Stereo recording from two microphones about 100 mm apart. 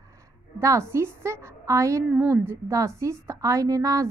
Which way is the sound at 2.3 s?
25° right (ahead or behind).